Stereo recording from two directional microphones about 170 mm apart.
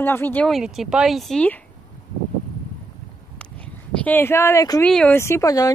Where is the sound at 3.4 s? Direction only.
5° left (ahead or behind).